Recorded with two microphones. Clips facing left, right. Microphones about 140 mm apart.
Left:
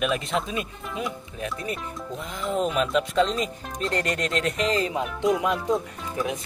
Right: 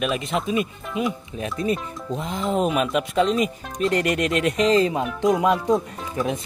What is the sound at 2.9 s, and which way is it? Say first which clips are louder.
Speech: right 2 dB; 10° right (ahead or behind).